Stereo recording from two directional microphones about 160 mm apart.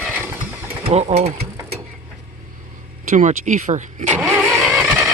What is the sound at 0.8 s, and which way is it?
Speech, 40° right (ahead or behind).